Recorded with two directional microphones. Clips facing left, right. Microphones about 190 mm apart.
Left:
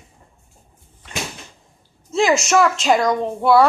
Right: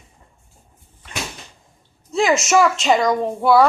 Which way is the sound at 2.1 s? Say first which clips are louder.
Even; centre (ahead or behind).